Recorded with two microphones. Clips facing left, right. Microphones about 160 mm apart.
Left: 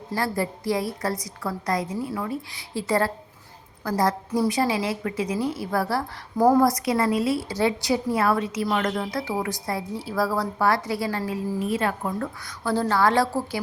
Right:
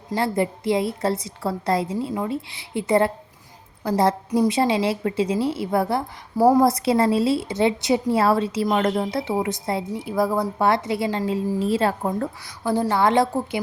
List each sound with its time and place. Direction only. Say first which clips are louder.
0.1 s a woman's voice: right 4 dB; 25° right (ahead or behind)
6.3 s speech: right 2 dB; 10° right (ahead or behind)
6.6 s a woman's voice: right 3 dB; 25° right (ahead or behind)
12.6 s a woman's voice: right 2 dB; 15° right (ahead or behind)